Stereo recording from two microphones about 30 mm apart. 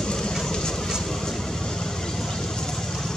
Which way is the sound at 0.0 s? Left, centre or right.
Left.